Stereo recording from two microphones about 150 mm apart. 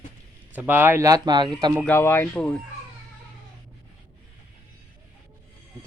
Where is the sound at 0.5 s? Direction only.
10° right (ahead or behind); by 1.5 s 30° right (ahead or behind).